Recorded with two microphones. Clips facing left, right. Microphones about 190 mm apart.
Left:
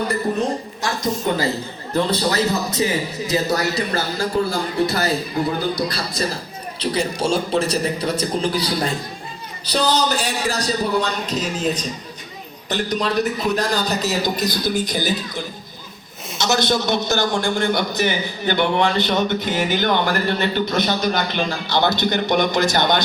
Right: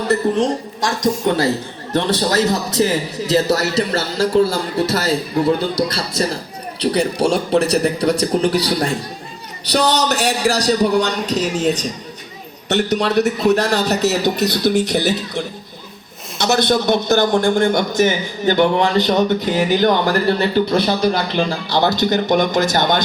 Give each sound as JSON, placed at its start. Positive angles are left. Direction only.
{"t": 0.1, "sound": "a man's voice", "side_deg": -90}
{"t": 6.7, "sound": "a man's voice", "side_deg": -65}
{"t": 16.4, "sound": "a man's voice", "side_deg": -60}